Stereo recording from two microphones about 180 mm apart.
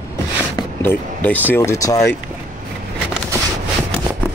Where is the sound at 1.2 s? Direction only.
10° left (ahead or behind).